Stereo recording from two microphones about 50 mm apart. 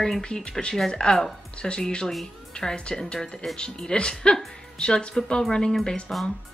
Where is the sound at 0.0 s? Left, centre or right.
Centre.